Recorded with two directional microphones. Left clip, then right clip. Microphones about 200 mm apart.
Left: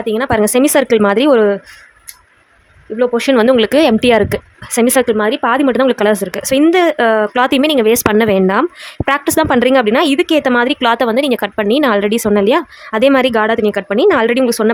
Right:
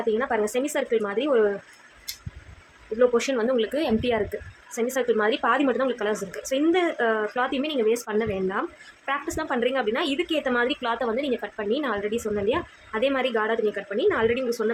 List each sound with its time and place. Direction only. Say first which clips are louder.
0.1 s a woman's voice: left 12 dB; 55° left (ahead or behind)
3.0 s a woman's voice: left 10 dB; 45° left (ahead or behind)